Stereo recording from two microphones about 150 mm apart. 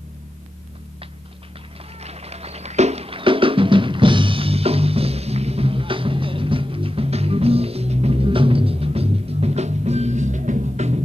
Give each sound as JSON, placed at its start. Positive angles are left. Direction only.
{"t": 2.0, "sound": "music", "side_deg": -45}